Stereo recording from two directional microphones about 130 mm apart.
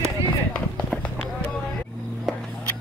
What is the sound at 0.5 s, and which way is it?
Run, 10° left (ahead or behind).